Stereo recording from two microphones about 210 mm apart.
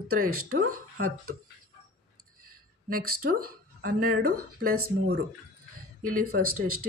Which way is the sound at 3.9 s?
45° right (ahead or behind).